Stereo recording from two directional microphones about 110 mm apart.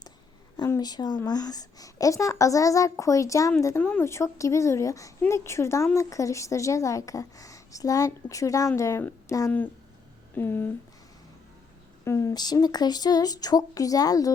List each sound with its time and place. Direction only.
0.5 s a woman's voice: 35° left (ahead or behind)
3.8 s speech: 15° left (ahead or behind)
12.0 s a woman's voice: 30° left (ahead or behind)